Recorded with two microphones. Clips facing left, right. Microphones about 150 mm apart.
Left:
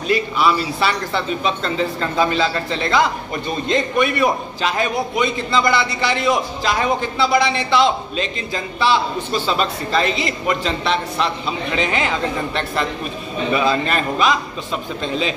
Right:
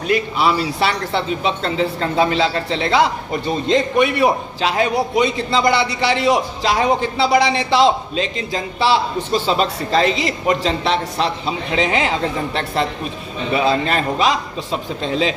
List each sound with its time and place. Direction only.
0.4 s speech: 25° right (ahead or behind)